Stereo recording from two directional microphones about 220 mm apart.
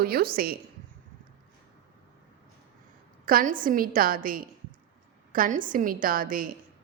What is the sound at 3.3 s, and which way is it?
A woman's voice, 40° right (ahead or behind).